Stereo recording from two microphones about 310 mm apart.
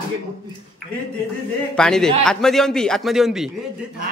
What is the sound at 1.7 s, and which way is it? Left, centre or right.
A man's voice, centre.